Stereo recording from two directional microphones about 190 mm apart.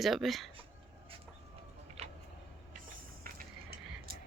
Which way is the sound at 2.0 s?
35° right (ahead or behind).